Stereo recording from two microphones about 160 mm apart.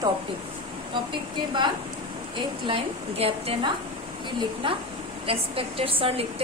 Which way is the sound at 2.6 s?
35° right (ahead or behind).